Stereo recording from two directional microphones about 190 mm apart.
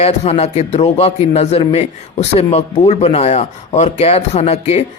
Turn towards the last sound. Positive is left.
turn(degrees=35)  # may be behind; listen again after turning